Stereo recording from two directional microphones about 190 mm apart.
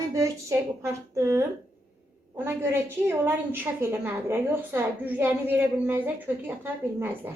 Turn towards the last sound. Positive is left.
turn(degrees=-10)  # may be behind; listen again after turning